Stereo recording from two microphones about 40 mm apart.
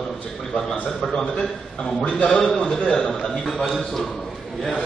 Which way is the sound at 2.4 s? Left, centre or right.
Centre.